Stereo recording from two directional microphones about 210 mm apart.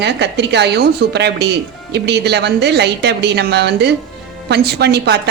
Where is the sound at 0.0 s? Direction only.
55° right (ahead or behind).